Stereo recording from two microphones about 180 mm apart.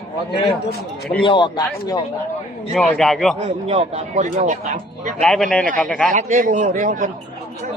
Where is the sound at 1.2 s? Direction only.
25° left (ahead or behind).